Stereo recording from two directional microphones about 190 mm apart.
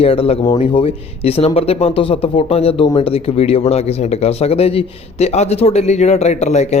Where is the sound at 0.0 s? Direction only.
30° left (ahead or behind).